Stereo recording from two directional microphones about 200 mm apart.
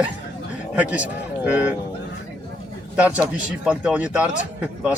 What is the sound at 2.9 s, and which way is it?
A man's voice, 5° right (ahead or behind).